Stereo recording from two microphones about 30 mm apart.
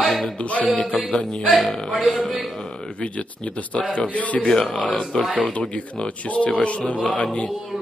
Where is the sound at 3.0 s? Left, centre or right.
Left.